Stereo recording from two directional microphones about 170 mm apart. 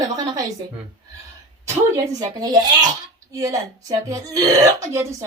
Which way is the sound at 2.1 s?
25° right (ahead or behind).